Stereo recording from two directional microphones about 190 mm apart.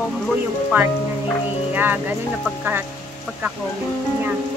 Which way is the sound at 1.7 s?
10° right (ahead or behind).